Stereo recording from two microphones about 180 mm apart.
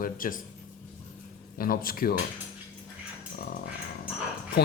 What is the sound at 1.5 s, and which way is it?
Speech, 50° left (ahead or behind).